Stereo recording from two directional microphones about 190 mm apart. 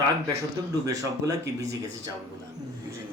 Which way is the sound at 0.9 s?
20° right (ahead or behind).